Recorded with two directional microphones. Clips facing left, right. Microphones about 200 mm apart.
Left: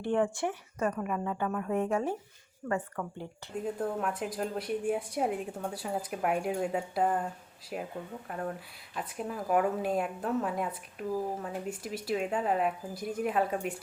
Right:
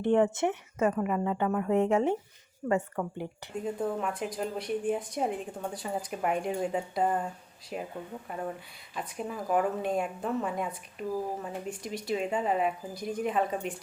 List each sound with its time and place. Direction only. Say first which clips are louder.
0.0 s speech: right 4 dB; 20° right (ahead or behind)
1.0 s a woman's voice: right 4 dB; 10° right (ahead or behind)
1.8 s speech: right 5 dB; 25° right (ahead or behind)
3.6 s a woman's voice: right 1 dB; centre (ahead or behind)